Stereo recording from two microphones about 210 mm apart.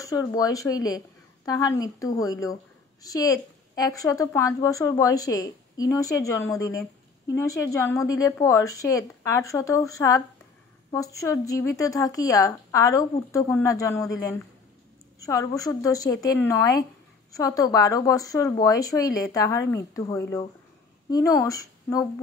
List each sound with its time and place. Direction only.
0.0 s a woman's voice: 15° left (ahead or behind)